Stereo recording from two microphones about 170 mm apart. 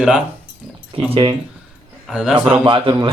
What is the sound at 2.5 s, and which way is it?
Speech, 30° right (ahead or behind).